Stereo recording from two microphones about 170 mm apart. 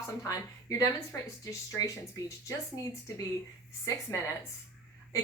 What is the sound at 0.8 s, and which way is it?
A woman's voice, 20° left (ahead or behind).